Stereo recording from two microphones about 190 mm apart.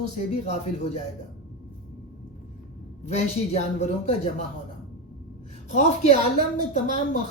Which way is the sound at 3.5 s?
35° left (ahead or behind).